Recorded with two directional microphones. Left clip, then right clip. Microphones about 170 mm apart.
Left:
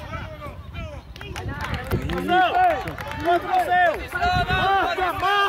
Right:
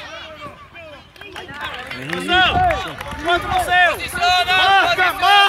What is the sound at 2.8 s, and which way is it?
Run, centre (ahead or behind).